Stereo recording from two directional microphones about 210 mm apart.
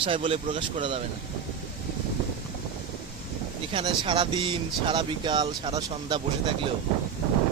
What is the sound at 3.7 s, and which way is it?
Speech, 25° right (ahead or behind).